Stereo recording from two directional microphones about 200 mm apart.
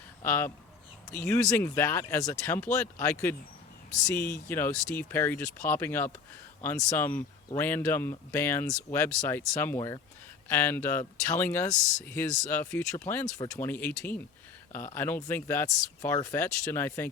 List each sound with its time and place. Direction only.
0.2 s speech: 10° left (ahead or behind)
4.2 s speech: 40° left (ahead or behind)
4.4 s speech: 10° left (ahead or behind)